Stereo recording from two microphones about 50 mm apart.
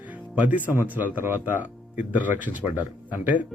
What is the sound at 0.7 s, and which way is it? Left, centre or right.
Speech, right.